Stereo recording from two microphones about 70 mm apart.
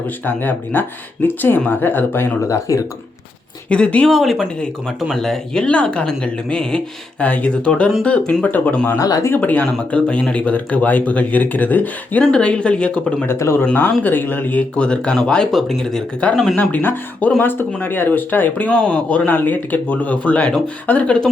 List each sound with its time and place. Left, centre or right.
0.3 s speech: left
2.5 s speech: left
3.7 s speech: centre
4.1 s speech: centre
9.0 s speech: left
9.4 s speech: left
12.2 s speech: centre
13.2 s speech: left
14.0 s speech: left
14.8 s speech: centre
16.6 s speech: left